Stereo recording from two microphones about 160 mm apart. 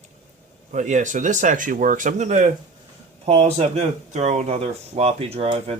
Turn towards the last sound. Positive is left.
turn(degrees=-40)  # may be behind; listen again after turning